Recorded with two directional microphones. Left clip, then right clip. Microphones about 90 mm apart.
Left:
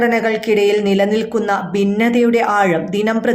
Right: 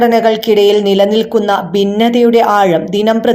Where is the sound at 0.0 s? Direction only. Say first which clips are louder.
Right 6 dB; 35° right (ahead or behind).